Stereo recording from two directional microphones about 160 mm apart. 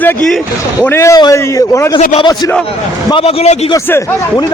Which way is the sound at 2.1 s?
30° left (ahead or behind).